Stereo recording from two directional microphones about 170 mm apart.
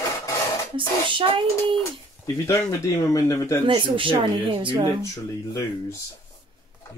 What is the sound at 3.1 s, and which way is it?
Speech, 20° left (ahead or behind).